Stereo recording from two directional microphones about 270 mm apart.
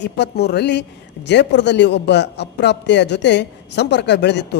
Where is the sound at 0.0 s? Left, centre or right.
Left.